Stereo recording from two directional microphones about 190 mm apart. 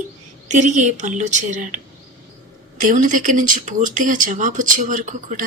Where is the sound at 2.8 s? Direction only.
45° right (ahead or behind).